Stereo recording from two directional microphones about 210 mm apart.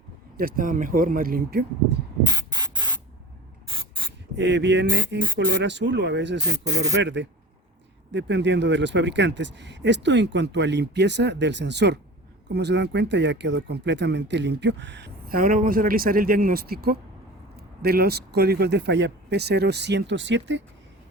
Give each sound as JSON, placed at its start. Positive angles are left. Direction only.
{"t": 0.3, "sound": "speech", "side_deg": -45}
{"t": 2.2, "sound": "spray", "side_deg": -20}
{"t": 4.4, "sound": "speech", "side_deg": -60}